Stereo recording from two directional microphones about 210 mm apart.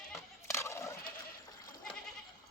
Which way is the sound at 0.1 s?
15° left (ahead or behind).